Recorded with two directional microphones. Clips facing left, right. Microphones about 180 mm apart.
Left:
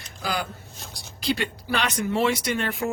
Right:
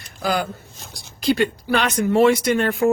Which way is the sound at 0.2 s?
50° right (ahead or behind).